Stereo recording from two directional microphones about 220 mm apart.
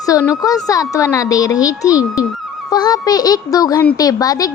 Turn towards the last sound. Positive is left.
turn(degrees=15)  # may be behind; listen again after turning